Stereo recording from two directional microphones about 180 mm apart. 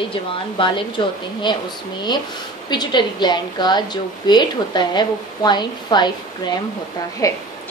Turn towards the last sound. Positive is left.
turn(degrees=20)  # may be behind; listen again after turning